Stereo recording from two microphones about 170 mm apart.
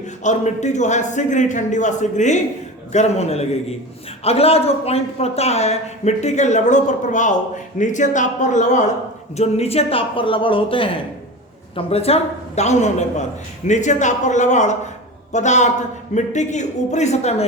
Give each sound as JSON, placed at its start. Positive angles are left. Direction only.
{"t": 0.2, "sound": "a man's voice", "side_deg": 45}